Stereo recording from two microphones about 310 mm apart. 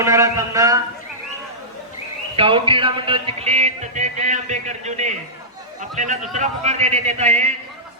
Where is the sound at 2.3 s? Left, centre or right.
Centre.